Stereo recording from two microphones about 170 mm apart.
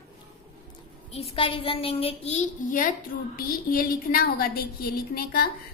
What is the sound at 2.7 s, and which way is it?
A woman's voice, 55° left (ahead or behind).